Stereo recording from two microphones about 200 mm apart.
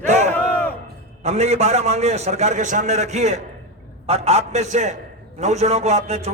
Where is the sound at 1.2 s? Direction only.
35° right (ahead or behind).